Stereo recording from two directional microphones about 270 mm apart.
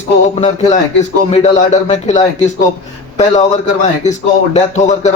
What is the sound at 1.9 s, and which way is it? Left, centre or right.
Speech, left.